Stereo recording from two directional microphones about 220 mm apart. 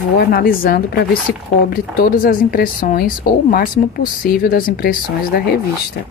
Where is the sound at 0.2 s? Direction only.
40° left (ahead or behind).